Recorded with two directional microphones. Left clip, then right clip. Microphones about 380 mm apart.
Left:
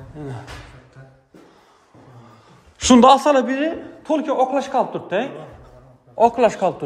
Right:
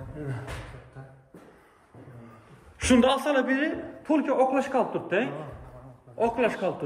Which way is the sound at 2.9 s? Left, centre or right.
Left.